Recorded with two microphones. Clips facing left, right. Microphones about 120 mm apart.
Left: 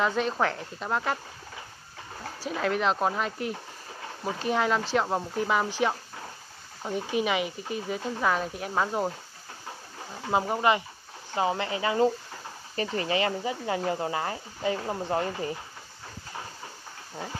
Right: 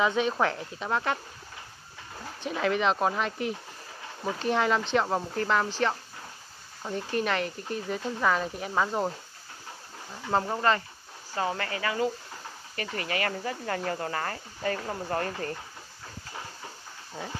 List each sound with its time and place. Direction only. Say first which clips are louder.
0.0 s speech: right 1 dB; centre (ahead or behind)
2.4 s speech: even; centre (ahead or behind)
10.3 s speech: left 1 dB; 10° left (ahead or behind)